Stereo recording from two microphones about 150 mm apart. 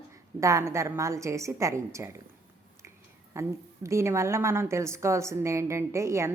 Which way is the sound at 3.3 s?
20° right (ahead or behind).